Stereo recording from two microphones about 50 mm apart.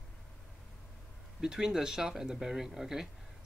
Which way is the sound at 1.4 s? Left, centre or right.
Centre.